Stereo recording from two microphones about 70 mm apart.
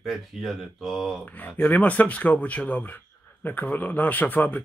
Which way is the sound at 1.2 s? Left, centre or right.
Left.